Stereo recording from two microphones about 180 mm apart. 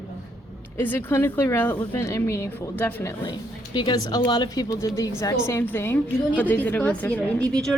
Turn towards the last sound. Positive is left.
turn(degrees=5)  # may be behind; listen again after turning